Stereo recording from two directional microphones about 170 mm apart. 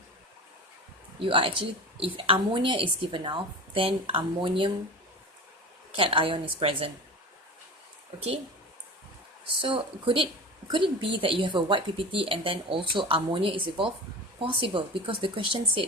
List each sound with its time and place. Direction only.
1.2 s a woman's voice: 30° right (ahead or behind)
6.0 s a woman's voice: 30° right (ahead or behind)
9.6 s a woman's voice: 30° right (ahead or behind)